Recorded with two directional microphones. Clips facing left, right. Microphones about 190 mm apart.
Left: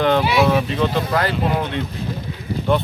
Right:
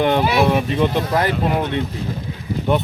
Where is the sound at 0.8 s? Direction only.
15° right (ahead or behind).